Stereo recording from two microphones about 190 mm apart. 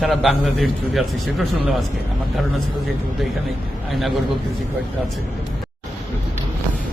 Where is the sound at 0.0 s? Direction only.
Centre (ahead or behind).